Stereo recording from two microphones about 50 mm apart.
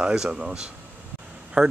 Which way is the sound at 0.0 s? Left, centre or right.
Centre.